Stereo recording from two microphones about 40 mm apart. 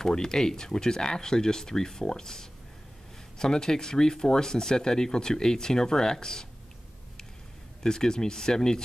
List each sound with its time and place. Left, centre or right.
0.0 s speech: centre
7.8 s speech: centre